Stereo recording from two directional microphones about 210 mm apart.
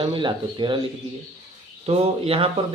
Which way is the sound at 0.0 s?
25° right (ahead or behind).